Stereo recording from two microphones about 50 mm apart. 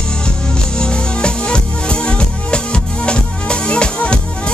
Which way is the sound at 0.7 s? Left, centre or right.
Centre.